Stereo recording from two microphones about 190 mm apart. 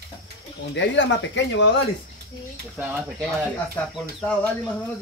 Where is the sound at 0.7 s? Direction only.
70° left (ahead or behind).